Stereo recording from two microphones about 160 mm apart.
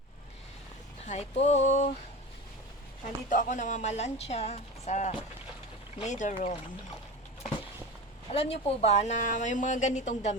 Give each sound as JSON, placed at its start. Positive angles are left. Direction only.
{"t": 1.0, "sound": "speech", "side_deg": 45}
{"t": 3.2, "sound": "speech", "side_deg": 50}
{"t": 8.3, "sound": "speech", "side_deg": 40}